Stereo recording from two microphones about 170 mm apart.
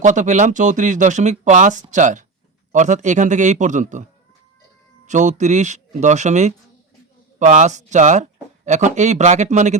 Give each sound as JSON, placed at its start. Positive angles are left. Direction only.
{"t": 0.0, "sound": "speech", "side_deg": -45}
{"t": 5.0, "sound": "speech", "side_deg": -45}